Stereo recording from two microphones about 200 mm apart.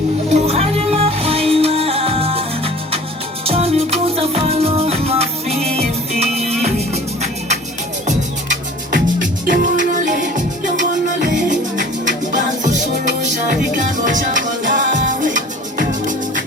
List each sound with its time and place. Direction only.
0.3 s music: 35° right (ahead or behind)
3.4 s music: 30° right (ahead or behind)